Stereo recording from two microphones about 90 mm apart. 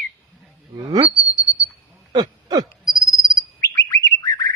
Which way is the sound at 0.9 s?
60° right (ahead or behind).